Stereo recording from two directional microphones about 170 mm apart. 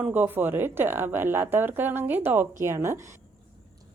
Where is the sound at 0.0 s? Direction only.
10° right (ahead or behind).